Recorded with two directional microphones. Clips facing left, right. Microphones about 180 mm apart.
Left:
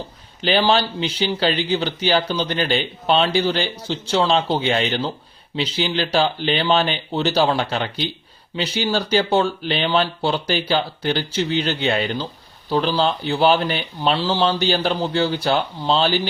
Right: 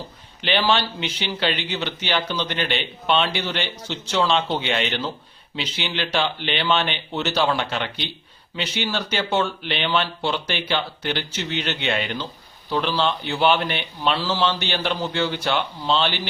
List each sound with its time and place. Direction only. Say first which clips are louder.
0.4 s speech: left 4 dB; 35° left (ahead or behind)